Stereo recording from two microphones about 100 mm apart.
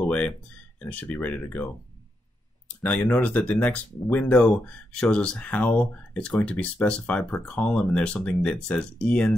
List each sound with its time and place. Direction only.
0.0 s a sound: 15° left (ahead or behind)
0.7 s speech: 15° left (ahead or behind)
2.8 s speech: 15° left (ahead or behind)